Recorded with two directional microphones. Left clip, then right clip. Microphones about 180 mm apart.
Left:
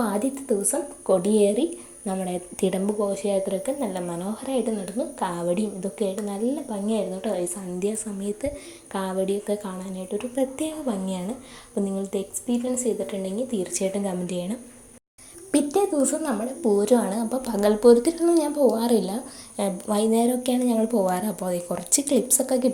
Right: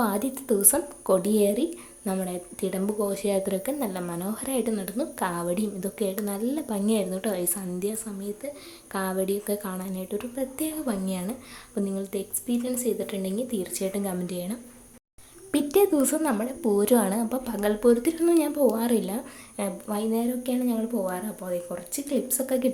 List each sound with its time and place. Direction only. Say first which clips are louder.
0.0 s a woman's voice: left 1 dB; centre (ahead or behind)
3.0 s a woman's voice: left 1 dB; 10° right (ahead or behind)
8.4 s a woman's voice: left 9 dB; 15° left (ahead or behind)
8.9 s a woman's voice: left 2 dB; centre (ahead or behind)
15.7 s a woman's voice: right 4 dB; 20° right (ahead or behind)
17.5 s a woman's voice: left 6 dB; 5° left (ahead or behind)
18.4 s a woman's voice: left 3 dB; 10° right (ahead or behind)